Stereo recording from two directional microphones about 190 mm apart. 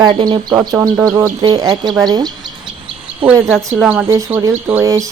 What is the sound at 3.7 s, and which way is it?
Speech, 10° right (ahead or behind).